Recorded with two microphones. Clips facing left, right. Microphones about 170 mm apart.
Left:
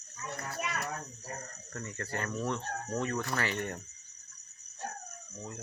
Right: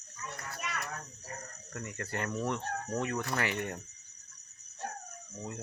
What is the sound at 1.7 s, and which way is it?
Speech, 15° right (ahead or behind).